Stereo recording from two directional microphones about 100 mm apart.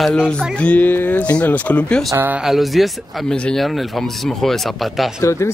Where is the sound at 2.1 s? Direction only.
15° right (ahead or behind).